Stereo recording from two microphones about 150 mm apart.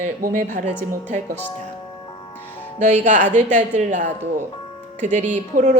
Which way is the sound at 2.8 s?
50° right (ahead or behind).